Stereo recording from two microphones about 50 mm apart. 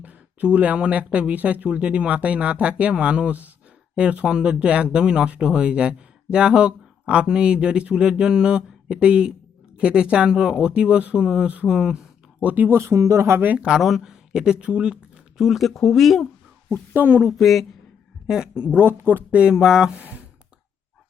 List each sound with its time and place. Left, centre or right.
0.0 s speech: right
12.5 s speech: right
12.7 s speech: right
13.3 s speech: right
13.6 s speech: centre
15.4 s speech: centre
16.7 s speech: right
17.1 s speech: right
17.3 s speech: centre
18.3 s speech: centre
19.5 s speech: centre
19.9 s speech: right